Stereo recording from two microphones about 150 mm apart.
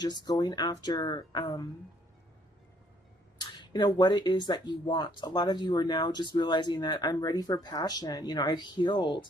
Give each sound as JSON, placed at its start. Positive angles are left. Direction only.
{"t": 0.0, "sound": "speech", "side_deg": 25}
{"t": 3.4, "sound": "speech", "side_deg": 30}